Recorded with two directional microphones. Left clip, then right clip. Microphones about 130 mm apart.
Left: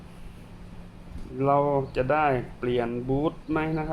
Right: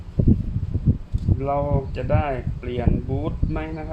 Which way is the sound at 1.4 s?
90° left.